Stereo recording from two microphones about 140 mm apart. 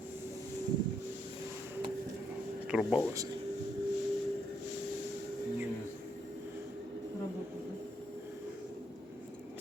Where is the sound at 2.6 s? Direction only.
10° right (ahead or behind).